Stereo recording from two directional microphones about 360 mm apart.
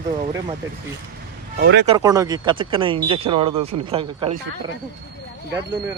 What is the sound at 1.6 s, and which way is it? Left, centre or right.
Speech, right.